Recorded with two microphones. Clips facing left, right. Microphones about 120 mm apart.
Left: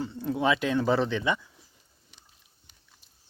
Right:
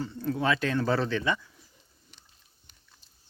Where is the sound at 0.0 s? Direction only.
15° left (ahead or behind).